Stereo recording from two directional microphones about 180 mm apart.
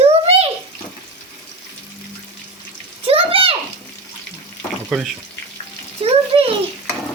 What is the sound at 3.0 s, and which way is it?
Bathtub, 30° right (ahead or behind).